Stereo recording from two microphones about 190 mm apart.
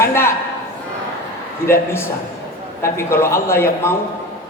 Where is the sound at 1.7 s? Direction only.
15° left (ahead or behind).